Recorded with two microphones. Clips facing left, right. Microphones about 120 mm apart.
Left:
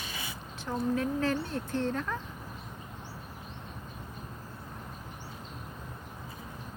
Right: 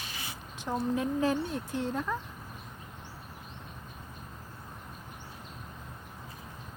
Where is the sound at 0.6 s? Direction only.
15° right (ahead or behind).